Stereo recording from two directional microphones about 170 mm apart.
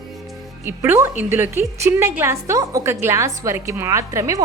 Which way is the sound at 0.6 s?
15° right (ahead or behind).